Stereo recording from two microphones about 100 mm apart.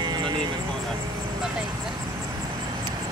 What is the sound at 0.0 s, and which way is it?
Vehicle, 45° right (ahead or behind).